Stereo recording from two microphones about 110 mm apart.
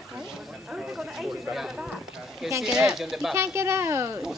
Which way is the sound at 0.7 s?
5° right (ahead or behind).